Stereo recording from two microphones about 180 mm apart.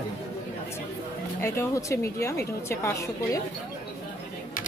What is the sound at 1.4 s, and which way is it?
Speech, 15° left (ahead or behind).